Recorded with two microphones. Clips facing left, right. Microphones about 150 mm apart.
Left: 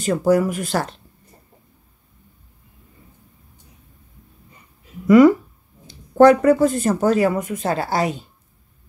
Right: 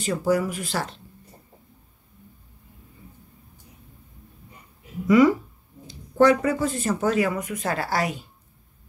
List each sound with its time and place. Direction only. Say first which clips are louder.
0.0 s speech: left 6 dB; 45° left (ahead or behind)
5.0 s speech: left 6 dB; 50° left (ahead or behind); by 8.2 s 25° left (ahead or behind)